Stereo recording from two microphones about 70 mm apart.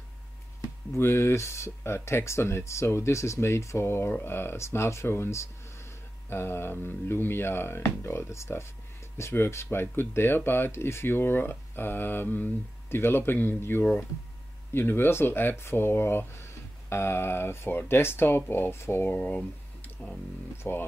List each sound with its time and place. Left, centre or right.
0.9 s speech: left
20.6 s speech: left